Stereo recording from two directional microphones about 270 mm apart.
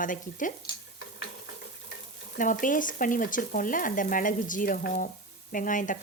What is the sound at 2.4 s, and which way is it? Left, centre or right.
Frying, left.